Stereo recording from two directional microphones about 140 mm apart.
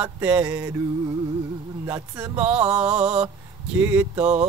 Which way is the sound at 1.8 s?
25° right (ahead or behind).